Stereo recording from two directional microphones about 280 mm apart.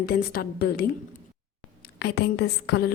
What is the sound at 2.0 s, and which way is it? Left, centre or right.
Speech, left.